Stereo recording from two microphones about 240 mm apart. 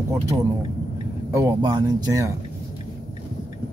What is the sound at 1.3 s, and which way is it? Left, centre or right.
Speech, centre.